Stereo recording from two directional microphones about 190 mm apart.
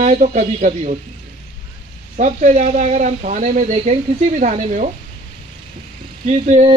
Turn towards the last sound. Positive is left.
turn(degrees=-35)  # may be behind; listen again after turning